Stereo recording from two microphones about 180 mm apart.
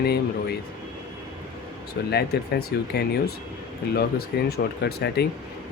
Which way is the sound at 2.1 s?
65° left (ahead or behind).